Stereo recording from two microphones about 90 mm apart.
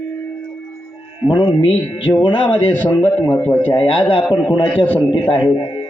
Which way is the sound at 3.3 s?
20° left (ahead or behind).